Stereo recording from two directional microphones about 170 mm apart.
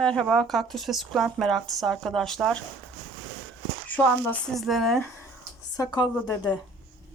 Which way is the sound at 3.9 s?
10° left (ahead or behind).